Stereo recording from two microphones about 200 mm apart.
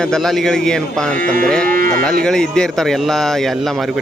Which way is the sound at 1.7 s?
45° right (ahead or behind).